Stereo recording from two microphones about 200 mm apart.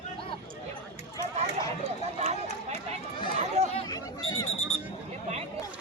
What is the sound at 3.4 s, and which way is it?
Chatter, 35° right (ahead or behind).